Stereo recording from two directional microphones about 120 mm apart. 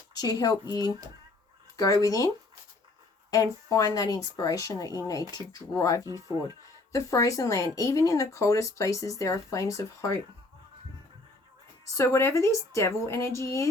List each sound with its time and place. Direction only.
0.1 s speech: 35° left (ahead or behind)
6.1 s speech: 30° right (ahead or behind)
6.9 s speech: 25° left (ahead or behind)
11.9 s speech: 25° left (ahead or behind)